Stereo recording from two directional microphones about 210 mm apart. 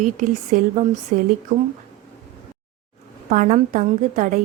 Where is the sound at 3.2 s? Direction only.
35° right (ahead or behind).